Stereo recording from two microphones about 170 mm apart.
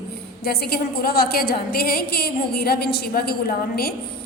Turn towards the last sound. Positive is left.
turn(degrees=65)  # may be behind; listen again after turning